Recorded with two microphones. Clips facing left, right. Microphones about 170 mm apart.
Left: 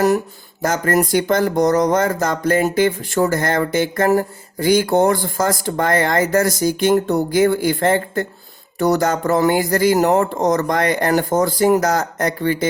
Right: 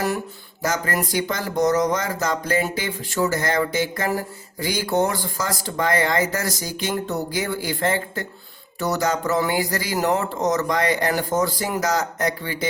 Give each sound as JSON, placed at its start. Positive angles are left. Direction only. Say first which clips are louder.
{"t": 0.6, "sound": "speech", "louder": "left 7 dB", "side_deg": 50}